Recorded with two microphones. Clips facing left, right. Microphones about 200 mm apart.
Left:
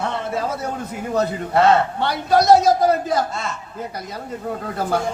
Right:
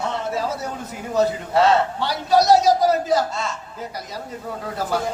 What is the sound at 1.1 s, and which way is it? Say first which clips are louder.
A man's voice: right 1 dB; 55° left (ahead or behind).